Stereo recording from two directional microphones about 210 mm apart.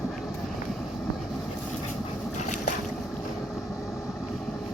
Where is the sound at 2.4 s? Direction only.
35° left (ahead or behind).